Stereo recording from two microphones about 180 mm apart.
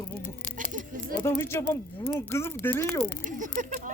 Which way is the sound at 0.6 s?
50° right (ahead or behind).